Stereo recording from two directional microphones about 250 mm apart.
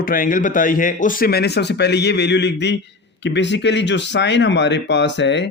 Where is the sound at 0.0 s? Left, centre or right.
Left.